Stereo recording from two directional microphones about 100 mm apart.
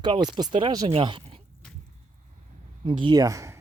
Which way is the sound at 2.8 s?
60° right (ahead or behind).